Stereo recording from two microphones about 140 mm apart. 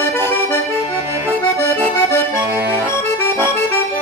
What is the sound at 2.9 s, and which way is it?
Accordion, 15° left (ahead or behind).